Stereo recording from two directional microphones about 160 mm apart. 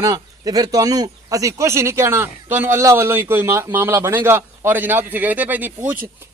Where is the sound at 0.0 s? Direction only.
20° right (ahead or behind).